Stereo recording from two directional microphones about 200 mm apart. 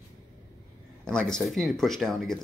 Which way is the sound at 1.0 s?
5° left (ahead or behind).